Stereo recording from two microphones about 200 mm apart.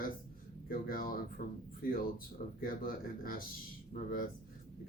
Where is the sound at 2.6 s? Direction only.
45° left (ahead or behind).